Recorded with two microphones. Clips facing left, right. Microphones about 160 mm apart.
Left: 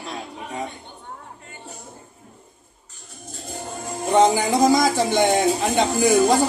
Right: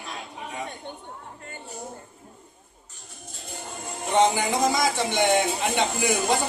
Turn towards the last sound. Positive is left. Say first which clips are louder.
# left 7 dB
turn(degrees=40)  # may be behind; listen again after turning